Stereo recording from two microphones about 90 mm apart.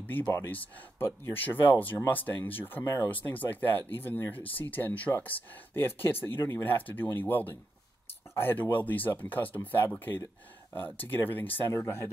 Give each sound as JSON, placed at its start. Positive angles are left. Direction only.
{"t": 0.2, "sound": "speech", "side_deg": 30}
{"t": 0.5, "sound": "speech", "side_deg": 20}